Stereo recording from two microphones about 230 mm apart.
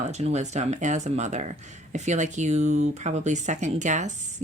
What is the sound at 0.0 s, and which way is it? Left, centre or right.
Speech, right.